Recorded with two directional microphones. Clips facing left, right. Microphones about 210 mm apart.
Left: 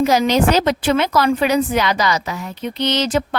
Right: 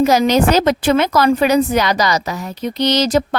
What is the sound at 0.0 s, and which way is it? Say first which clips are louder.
A woman's voice: right 2 dB; 45° right (ahead or behind).